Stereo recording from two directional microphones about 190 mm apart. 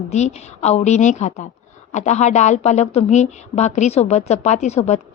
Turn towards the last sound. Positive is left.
turn(degrees=35)  # may be behind; listen again after turning